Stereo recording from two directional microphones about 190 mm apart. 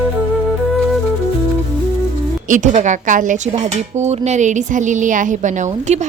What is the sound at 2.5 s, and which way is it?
A woman's voice, 40° right (ahead or behind).